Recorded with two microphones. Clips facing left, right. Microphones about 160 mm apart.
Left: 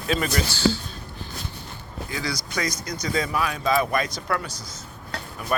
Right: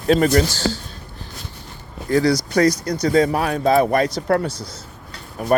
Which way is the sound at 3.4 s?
60° right (ahead or behind).